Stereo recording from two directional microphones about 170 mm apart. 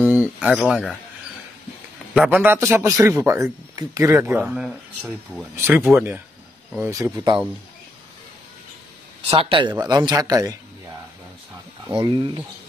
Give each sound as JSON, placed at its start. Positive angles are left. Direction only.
{"t": 0.0, "sound": "a sound", "side_deg": -10}
{"t": 2.1, "sound": "a man's voice", "side_deg": -10}
{"t": 4.4, "sound": "speech", "side_deg": -5}
{"t": 5.6, "sound": "a man's voice", "side_deg": -15}
{"t": 9.3, "sound": "a man's voice", "side_deg": -35}
{"t": 12.0, "sound": "a man's voice", "side_deg": -25}